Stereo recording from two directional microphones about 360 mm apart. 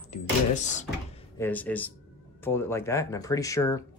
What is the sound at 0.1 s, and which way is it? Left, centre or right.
Speech, centre.